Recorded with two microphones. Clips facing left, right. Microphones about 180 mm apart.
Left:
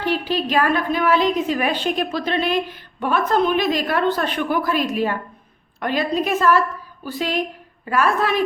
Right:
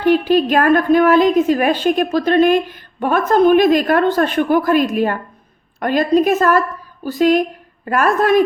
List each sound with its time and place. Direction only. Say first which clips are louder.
0.0 s a woman's voice: right 9 dB; 50° right (ahead or behind)